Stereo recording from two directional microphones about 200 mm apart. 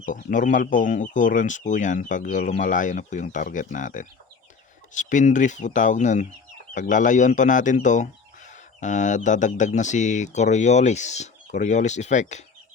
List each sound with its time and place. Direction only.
0.0 s speech: 40° left (ahead or behind)